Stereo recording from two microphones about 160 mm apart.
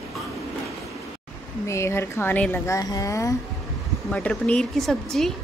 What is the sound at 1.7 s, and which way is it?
A woman's voice, 15° left (ahead or behind).